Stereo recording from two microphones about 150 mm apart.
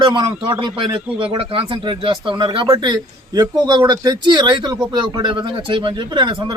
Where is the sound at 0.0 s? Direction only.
30° right (ahead or behind).